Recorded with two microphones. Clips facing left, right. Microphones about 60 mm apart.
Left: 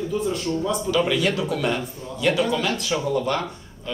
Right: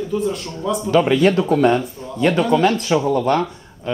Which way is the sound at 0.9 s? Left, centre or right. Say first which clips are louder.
Right 8 dB; right.